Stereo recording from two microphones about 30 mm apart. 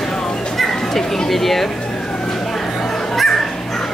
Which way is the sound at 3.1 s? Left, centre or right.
Centre.